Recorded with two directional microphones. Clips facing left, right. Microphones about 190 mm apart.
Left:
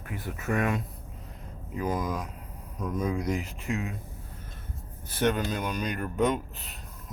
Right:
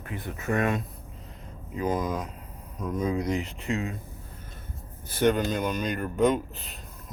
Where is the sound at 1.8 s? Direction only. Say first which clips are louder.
Right 2 dB; 25° right (ahead or behind).